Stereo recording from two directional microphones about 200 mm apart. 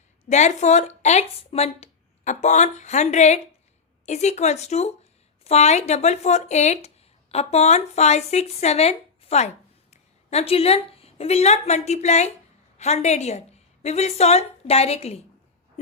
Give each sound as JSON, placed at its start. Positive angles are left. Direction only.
{"t": 0.3, "sound": "a woman's voice", "side_deg": 35}